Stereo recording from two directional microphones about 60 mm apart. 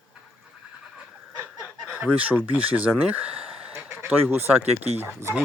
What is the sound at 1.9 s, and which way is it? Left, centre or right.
Speech, right.